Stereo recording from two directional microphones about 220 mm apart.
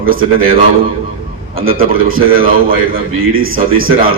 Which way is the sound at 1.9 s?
40° right (ahead or behind).